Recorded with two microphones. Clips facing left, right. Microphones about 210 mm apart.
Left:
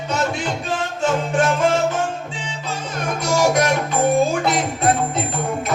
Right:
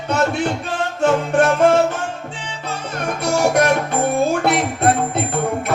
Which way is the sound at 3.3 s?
60° right (ahead or behind).